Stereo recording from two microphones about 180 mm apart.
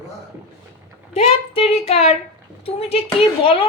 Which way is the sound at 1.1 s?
35° left (ahead or behind).